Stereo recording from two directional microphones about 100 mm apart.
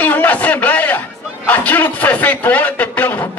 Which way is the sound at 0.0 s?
15° left (ahead or behind).